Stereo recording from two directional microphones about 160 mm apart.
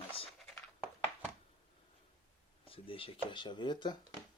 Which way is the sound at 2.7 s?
35° left (ahead or behind).